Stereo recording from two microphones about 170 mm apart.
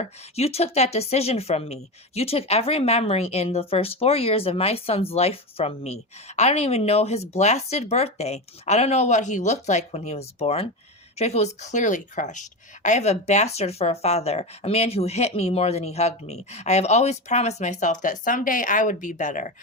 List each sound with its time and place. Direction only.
0.0 s a woman's voice: 40° left (ahead or behind)